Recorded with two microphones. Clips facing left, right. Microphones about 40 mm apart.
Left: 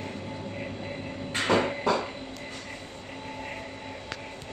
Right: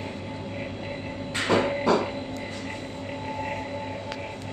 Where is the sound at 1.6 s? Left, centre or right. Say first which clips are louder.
Right 4 dB; right.